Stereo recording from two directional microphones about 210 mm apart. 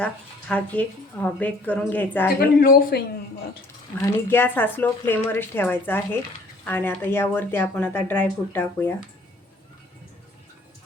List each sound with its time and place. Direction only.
0.0 s speech: 5° left (ahead or behind)
2.4 s speech: 45° left (ahead or behind)
4.0 s speech: 10° left (ahead or behind)